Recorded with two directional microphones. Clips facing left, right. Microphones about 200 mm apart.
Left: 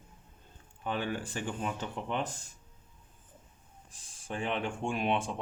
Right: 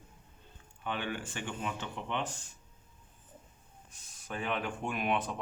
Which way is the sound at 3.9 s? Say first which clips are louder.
Left 2 dB; 30° left (ahead or behind).